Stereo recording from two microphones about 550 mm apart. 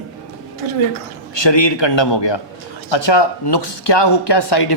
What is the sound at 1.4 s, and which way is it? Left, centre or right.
Speech, left.